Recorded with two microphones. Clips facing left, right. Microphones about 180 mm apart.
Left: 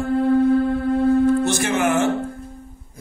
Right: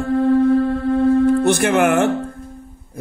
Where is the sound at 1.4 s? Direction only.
60° right (ahead or behind).